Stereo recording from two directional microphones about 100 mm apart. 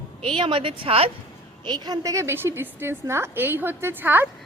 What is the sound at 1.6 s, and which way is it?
A woman's voice, 45° right (ahead or behind).